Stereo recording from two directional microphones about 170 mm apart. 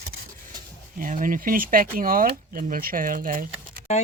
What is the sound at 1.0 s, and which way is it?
Speech, 50° right (ahead or behind).